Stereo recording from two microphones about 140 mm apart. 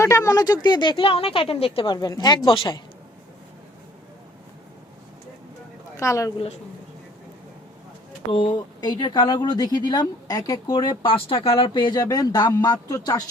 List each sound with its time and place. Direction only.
0.0 s speech: 20° left (ahead or behind)
6.0 s a woman's voice: 20° left (ahead or behind)
8.3 s speech: 35° left (ahead or behind)